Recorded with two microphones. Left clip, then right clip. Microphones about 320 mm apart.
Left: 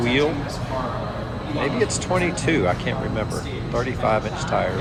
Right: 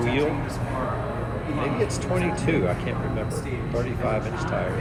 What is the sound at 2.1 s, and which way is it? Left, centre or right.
Speech, left.